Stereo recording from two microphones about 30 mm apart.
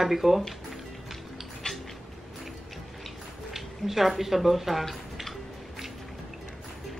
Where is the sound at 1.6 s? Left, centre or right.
Left.